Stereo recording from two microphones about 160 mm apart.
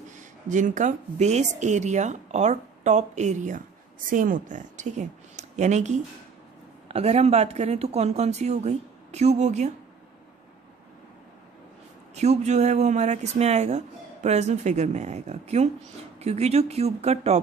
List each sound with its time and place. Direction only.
0.5 s a woman's voice: 50° right (ahead or behind)
12.2 s speech: 45° right (ahead or behind)